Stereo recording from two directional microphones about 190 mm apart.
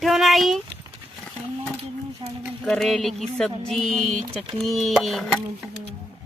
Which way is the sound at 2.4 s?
Centre (ahead or behind).